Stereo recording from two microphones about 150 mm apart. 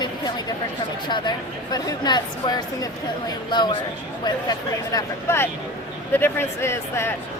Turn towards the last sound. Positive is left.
turn(degrees=15)  # may be behind; listen again after turning